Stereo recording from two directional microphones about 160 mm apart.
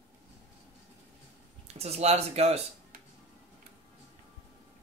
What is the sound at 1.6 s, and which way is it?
Speech, 40° right (ahead or behind).